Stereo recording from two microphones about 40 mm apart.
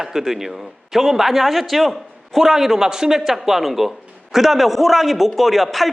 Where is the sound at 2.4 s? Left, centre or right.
Centre.